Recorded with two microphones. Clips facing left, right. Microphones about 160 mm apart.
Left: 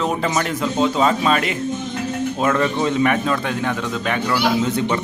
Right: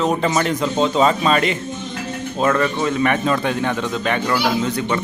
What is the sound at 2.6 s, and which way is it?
Speech, 20° left (ahead or behind).